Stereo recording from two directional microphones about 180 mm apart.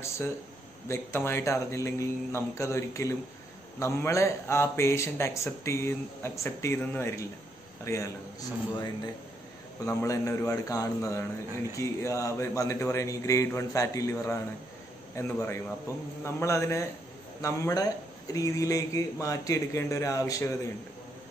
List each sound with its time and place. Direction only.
0.8 s a man's voice: 15° left (ahead or behind)